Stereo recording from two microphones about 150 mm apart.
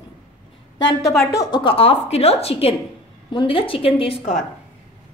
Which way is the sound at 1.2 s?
20° left (ahead or behind).